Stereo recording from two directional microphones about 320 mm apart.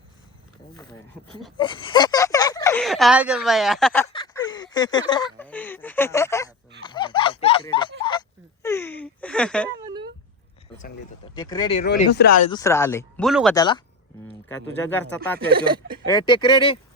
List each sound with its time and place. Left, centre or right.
1.5 s speech: centre
6.8 s a sound: centre
9.8 s a sound: centre
11.3 s speech: centre
11.8 s speech: left
12.5 s speech: centre
13.6 s speech: centre
15.6 s speech: centre
16.0 s speech: centre